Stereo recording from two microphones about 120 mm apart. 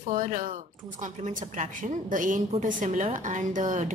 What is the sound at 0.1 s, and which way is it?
A woman's voice, 90° right.